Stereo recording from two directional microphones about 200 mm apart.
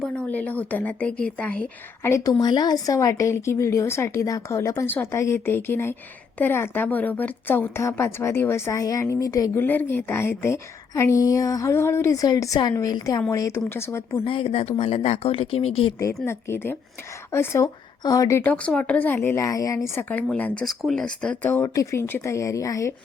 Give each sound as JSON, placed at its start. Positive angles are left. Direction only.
{"t": 0.0, "sound": "speech", "side_deg": 5}
{"t": 14.2, "sound": "speech", "side_deg": 30}
{"t": 16.2, "sound": "speech", "side_deg": 10}